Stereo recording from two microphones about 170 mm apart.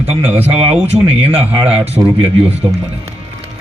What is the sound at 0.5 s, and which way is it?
A man's voice, 35° right (ahead or behind).